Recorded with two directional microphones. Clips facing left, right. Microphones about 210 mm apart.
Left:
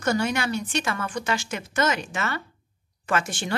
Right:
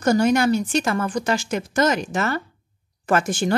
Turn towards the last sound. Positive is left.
turn(degrees=-40)  # may be behind; listen again after turning